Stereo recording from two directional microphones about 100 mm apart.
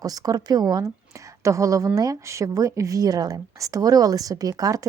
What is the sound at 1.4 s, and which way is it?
A woman's voice, 30° right (ahead or behind).